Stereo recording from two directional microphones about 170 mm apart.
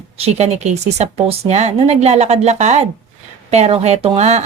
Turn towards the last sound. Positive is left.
turn(degrees=-40)  # may be behind; listen again after turning